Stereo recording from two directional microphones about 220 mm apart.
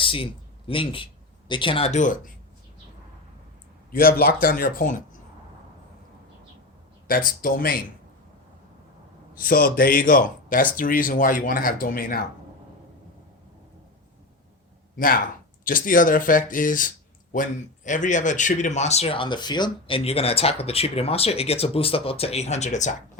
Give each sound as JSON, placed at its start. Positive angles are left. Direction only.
{"t": 0.0, "sound": "a sound", "side_deg": 25}
{"t": 0.7, "sound": "a man's voice", "side_deg": 25}
{"t": 3.9, "sound": "speech", "side_deg": 40}
{"t": 7.4, "sound": "speech", "side_deg": 40}
{"t": 9.3, "sound": "speech", "side_deg": 40}
{"t": 14.9, "sound": "a man's voice", "side_deg": 40}